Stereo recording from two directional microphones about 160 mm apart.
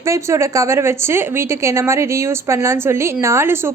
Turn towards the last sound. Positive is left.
turn(degrees=-15)  # may be behind; listen again after turning